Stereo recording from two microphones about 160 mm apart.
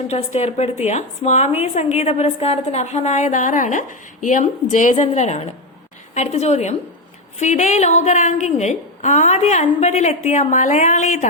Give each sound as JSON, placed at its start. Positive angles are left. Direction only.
{"t": 0.3, "sound": "a woman's voice", "side_deg": 45}